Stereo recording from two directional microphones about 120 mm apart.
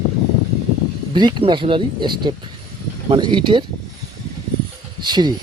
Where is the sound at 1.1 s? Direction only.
40° right (ahead or behind).